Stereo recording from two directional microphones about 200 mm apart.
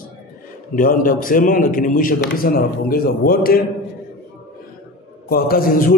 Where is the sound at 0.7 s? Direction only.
45° left (ahead or behind).